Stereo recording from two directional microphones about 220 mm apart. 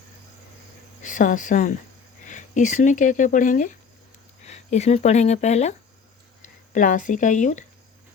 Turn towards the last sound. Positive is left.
turn(degrees=35)  # may be behind; listen again after turning